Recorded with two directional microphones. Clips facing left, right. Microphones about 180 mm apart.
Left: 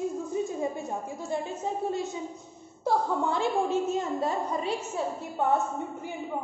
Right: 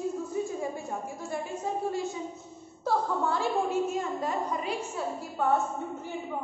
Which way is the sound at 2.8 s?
20° left (ahead or behind).